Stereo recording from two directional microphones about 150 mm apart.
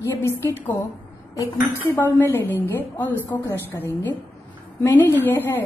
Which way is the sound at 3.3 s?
25° left (ahead or behind).